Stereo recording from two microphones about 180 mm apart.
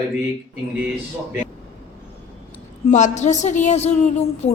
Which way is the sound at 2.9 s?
40° left (ahead or behind).